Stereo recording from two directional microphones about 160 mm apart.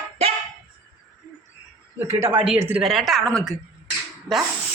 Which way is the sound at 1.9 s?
15° right (ahead or behind).